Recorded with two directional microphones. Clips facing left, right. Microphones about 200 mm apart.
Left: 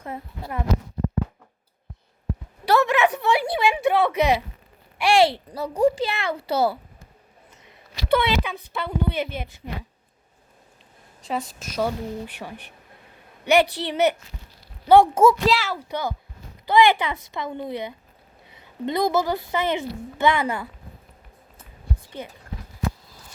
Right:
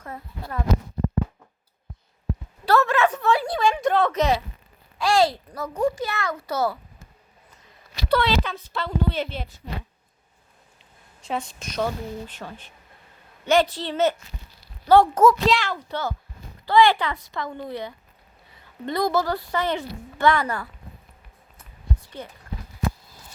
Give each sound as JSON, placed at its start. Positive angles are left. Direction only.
{"t": 2.6, "sound": "a sound", "side_deg": 15}
{"t": 4.9, "sound": "a child's voice", "side_deg": 25}
{"t": 8.1, "sound": "a woman's voice", "side_deg": 15}
{"t": 11.2, "sound": "a woman's voice", "side_deg": 0}
{"t": 15.4, "sound": "a woman's voice", "side_deg": 5}